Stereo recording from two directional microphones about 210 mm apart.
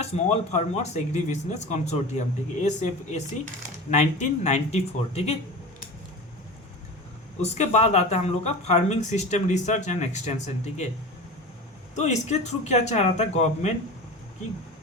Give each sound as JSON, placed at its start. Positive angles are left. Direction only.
{"t": 0.0, "sound": "speech", "side_deg": 30}
{"t": 7.4, "sound": "speech", "side_deg": 30}
{"t": 11.9, "sound": "speech", "side_deg": 35}